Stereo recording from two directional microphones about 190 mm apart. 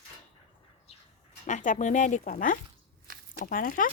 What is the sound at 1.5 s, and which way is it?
Speech, 40° left (ahead or behind).